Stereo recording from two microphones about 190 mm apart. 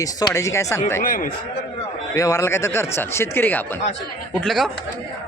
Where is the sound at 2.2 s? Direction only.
15° left (ahead or behind).